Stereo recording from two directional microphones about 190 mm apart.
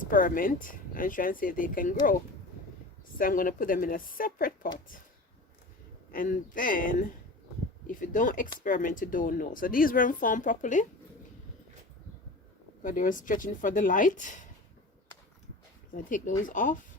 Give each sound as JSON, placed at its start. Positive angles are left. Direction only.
{"t": 0.0, "sound": "speech", "side_deg": 45}
{"t": 3.2, "sound": "speech", "side_deg": 45}
{"t": 6.1, "sound": "speech", "side_deg": 50}
{"t": 12.8, "sound": "speech", "side_deg": 45}
{"t": 16.0, "sound": "speech", "side_deg": 45}